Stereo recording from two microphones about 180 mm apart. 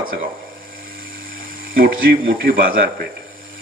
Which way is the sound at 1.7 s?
55° right (ahead or behind).